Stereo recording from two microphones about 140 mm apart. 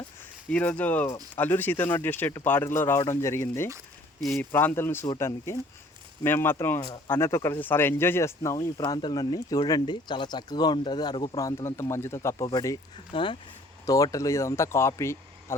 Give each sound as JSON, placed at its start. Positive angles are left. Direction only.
{"t": 0.5, "sound": "speech", "side_deg": 10}